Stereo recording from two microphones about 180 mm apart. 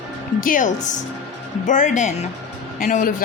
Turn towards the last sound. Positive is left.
turn(degrees=50)  # may be behind; listen again after turning